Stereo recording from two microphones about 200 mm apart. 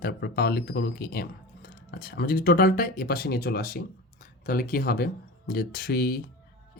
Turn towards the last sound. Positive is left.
turn(degrees=50)  # may be behind; listen again after turning